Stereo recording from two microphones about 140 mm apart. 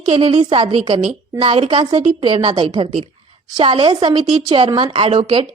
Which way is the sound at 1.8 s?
30° right (ahead or behind).